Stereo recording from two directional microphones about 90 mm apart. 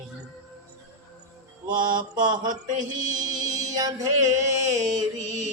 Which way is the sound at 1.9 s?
55° right (ahead or behind).